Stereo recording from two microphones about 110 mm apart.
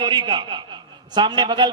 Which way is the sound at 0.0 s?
40° right (ahead or behind).